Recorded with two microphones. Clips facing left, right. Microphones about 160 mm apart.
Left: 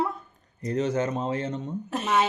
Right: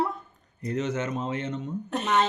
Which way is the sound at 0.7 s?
35° left (ahead or behind).